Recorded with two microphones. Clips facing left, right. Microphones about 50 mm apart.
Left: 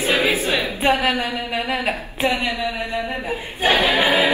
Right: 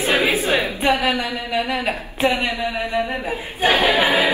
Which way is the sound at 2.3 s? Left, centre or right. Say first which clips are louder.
Right 1 dB; right.